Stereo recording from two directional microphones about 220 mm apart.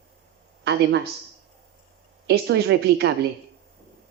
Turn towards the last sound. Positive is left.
turn(degrees=-50)  # may be behind; listen again after turning